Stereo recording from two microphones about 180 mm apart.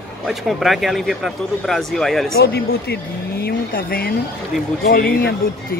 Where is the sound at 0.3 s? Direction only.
Centre (ahead or behind).